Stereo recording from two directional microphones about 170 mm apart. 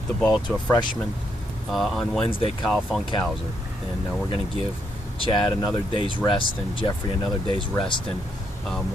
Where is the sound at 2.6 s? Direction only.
Centre (ahead or behind).